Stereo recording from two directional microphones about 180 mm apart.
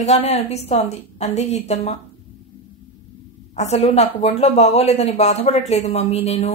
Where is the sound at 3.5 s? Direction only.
40° left (ahead or behind).